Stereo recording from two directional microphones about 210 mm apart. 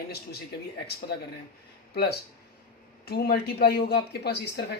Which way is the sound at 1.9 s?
50° left (ahead or behind).